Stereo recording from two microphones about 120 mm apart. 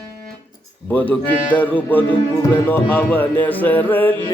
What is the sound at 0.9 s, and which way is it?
Music, 15° left (ahead or behind).